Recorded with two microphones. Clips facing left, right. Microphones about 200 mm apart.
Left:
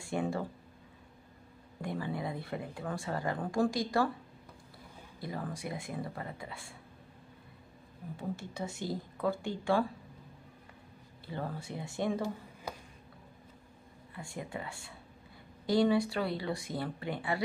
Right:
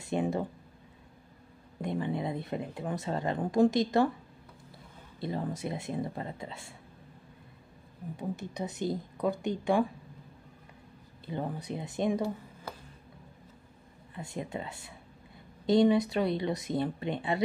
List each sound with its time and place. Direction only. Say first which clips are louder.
0.0 s a sound: right 3 dB; 20° right (ahead or behind)
1.8 s speech: right 4 dB; 20° right (ahead or behind)
5.2 s speech: right 5 dB; 25° right (ahead or behind)
8.2 s speech: right 3 dB; 15° right (ahead or behind)
11.2 s speech: right 4 dB; 20° right (ahead or behind)
14.1 s speech: right 4 dB; 20° right (ahead or behind)